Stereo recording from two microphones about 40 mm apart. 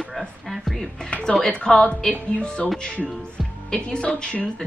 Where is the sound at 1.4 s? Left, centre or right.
Left.